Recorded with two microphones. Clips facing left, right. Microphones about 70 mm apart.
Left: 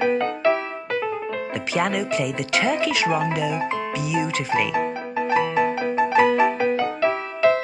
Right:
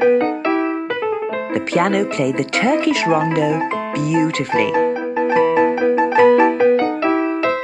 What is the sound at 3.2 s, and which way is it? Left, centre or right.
Speech, right.